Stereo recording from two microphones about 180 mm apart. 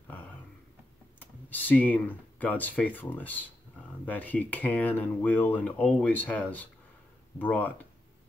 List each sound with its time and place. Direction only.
1.2 s speech: 10° left (ahead or behind)